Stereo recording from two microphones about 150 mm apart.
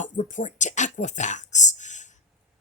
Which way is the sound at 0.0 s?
55° left (ahead or behind).